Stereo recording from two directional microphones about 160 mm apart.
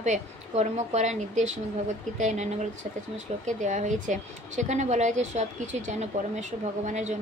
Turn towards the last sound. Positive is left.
turn(degrees=-50)  # may be behind; listen again after turning